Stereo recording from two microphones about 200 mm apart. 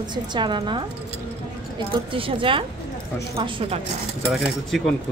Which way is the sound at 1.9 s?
25° right (ahead or behind).